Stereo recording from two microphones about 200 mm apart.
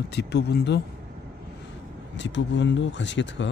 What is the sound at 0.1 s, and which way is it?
Speech, 55° left (ahead or behind).